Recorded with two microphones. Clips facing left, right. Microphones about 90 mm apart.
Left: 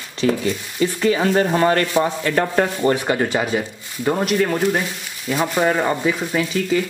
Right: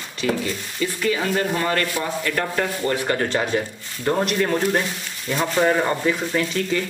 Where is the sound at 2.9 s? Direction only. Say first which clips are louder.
Left 2 dB; 15° left (ahead or behind).